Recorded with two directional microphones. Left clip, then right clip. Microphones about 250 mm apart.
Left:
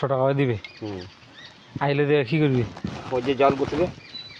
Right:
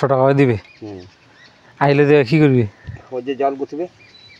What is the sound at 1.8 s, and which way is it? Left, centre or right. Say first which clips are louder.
Speech: right 9 dB; right.